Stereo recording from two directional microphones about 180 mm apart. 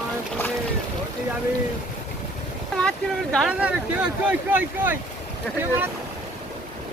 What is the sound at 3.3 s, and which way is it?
Speech, centre (ahead or behind).